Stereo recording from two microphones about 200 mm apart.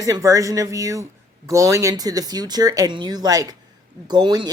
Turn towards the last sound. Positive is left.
turn(degrees=-20)  # may be behind; listen again after turning